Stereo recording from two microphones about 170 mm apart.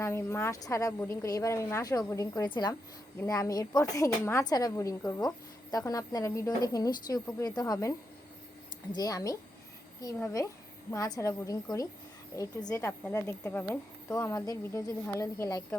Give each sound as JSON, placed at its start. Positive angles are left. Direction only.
{"t": 0.0, "sound": "a woman's voice", "side_deg": 15}